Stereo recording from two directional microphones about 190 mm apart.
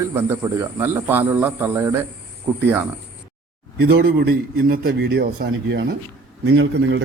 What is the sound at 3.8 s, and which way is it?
A man's voice, 55° right (ahead or behind).